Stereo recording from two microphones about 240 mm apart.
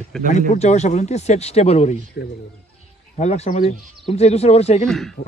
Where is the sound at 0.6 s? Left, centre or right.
Left.